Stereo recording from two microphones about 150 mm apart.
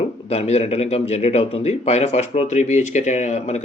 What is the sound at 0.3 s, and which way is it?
Speech, 45° left (ahead or behind).